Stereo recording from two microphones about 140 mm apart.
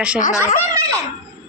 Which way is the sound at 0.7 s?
20° right (ahead or behind).